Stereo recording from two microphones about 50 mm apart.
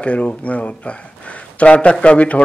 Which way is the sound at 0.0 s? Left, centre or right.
Left.